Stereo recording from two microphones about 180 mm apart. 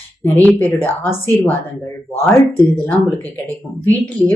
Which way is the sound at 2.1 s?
10° left (ahead or behind).